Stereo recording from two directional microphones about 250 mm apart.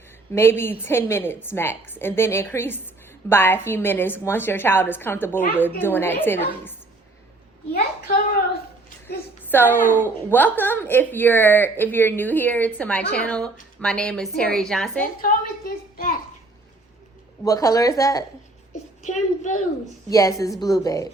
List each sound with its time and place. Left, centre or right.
0.3 s a woman's voice: centre
7.7 s a child's voice: left
9.0 s a woman's voice: centre
15.2 s a woman's voice: left
17.4 s a woman's voice: centre
19.0 s a woman's voice: left
20.1 s a woman's voice: centre